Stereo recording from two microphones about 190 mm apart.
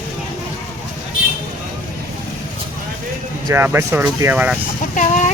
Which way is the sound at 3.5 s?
10° right (ahead or behind).